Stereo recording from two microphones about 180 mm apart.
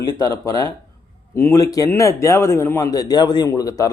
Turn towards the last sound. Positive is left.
turn(degrees=20)  # may be behind; listen again after turning